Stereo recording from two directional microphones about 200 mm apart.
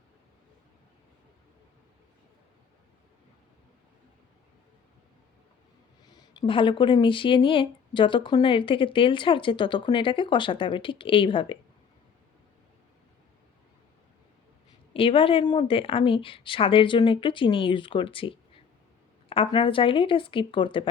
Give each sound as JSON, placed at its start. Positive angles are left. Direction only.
{"t": 6.1, "sound": "speech", "side_deg": 20}
{"t": 14.9, "sound": "speech", "side_deg": 25}